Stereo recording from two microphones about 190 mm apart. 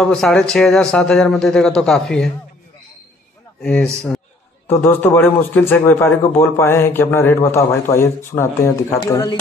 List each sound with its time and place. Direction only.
0.0 s a man's voice: 5° left (ahead or behind)
3.6 s a man's voice: 5° left (ahead or behind); by 9.4 s 20° left (ahead or behind)